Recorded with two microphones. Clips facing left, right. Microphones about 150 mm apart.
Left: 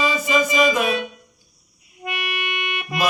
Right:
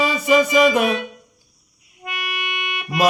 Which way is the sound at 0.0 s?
65° right (ahead or behind).